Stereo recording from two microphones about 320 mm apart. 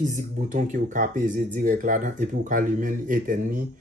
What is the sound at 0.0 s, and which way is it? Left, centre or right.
Speech, right.